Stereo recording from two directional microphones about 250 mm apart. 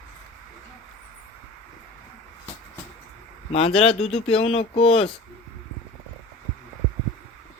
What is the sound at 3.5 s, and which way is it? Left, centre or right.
Speech, left.